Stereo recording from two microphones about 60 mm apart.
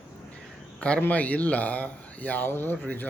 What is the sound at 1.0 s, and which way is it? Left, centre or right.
Speech, left.